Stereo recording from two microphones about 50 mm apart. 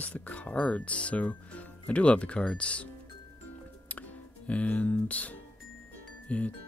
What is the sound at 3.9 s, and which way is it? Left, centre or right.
Music, left.